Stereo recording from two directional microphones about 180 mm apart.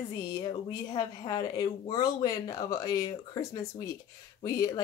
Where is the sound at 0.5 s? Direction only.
25° left (ahead or behind).